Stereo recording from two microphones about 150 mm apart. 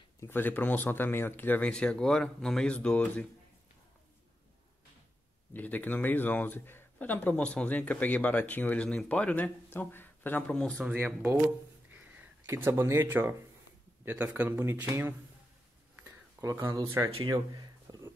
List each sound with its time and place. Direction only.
0.2 s speech: 15° left (ahead or behind)
5.5 s speech: 10° left (ahead or behind)
10.8 s speech: 10° right (ahead or behind)
11.9 s a sound: 10° right (ahead or behind)
14.0 s speech: 10° right (ahead or behind)
17.3 s a sound: 25° right (ahead or behind)